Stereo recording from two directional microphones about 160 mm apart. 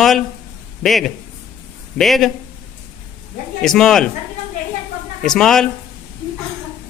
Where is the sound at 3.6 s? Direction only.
5° left (ahead or behind).